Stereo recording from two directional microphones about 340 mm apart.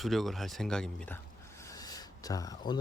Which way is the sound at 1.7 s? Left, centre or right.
Centre.